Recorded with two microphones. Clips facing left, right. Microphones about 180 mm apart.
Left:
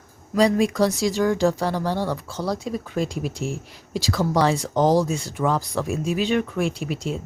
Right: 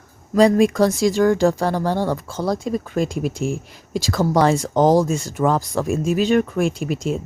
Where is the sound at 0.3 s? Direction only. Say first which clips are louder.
Right 4 dB; 50° right (ahead or behind).